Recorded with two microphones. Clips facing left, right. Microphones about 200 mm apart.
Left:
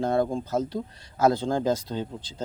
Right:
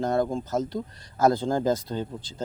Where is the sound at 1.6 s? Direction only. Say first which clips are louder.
Right 1 dB; 45° right (ahead or behind).